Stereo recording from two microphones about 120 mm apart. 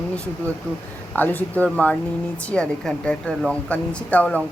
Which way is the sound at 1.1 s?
15° left (ahead or behind).